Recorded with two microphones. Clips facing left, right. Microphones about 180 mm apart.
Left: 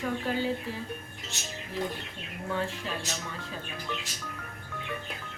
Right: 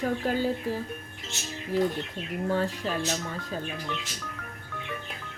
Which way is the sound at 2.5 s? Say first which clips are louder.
Right 4 dB; 40° right (ahead or behind).